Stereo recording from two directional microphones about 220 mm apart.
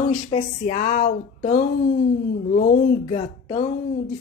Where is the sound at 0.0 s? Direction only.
35° left (ahead or behind).